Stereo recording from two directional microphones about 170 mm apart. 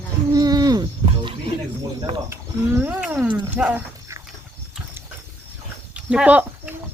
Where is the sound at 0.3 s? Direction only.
20° right (ahead or behind).